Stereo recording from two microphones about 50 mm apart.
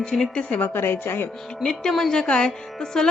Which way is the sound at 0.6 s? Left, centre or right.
Left.